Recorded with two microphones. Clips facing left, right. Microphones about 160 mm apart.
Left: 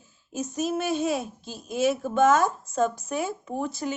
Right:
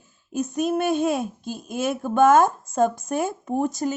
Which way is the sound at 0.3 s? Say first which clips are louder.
Right 4 dB; 55° right (ahead or behind).